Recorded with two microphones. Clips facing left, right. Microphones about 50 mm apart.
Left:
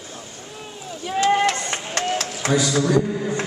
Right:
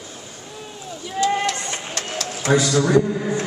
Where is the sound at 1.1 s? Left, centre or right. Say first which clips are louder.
Left 2 dB; left.